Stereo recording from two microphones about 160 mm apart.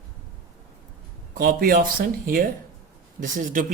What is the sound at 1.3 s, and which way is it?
Speech, 65° right (ahead or behind).